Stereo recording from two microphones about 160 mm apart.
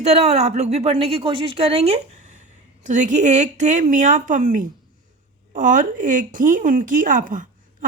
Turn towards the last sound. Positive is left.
turn(degrees=-55)  # may be behind; listen again after turning